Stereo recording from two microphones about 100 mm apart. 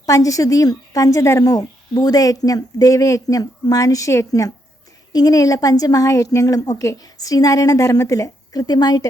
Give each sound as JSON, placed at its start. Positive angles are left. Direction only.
{"t": 0.0, "sound": "a woman's voice", "side_deg": 35}